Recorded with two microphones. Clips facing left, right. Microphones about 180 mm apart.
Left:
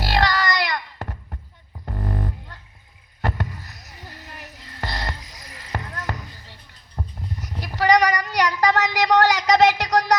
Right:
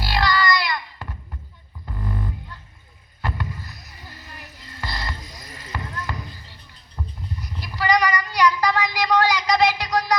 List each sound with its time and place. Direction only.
0.2 s baby cry: 45° left (ahead or behind)
0.7 s heart sounds: 45° left (ahead or behind)
1.8 s dog: 45° left (ahead or behind)
3.2 s a sound: 45° left (ahead or behind)
4.8 s boat: 45° left (ahead or behind)
5.7 s basketball bounce: 45° left (ahead or behind)
6.9 s child singing: 45° left (ahead or behind)